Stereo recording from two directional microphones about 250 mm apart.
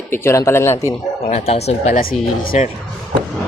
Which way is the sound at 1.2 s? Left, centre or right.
Left.